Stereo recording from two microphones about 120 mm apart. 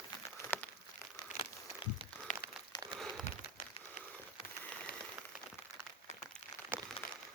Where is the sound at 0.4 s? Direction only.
40° left (ahead or behind).